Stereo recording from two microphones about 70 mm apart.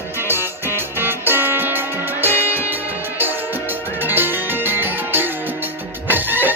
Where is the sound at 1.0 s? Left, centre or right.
Right.